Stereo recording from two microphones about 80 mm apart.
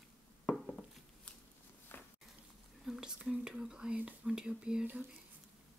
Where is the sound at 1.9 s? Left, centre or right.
Left.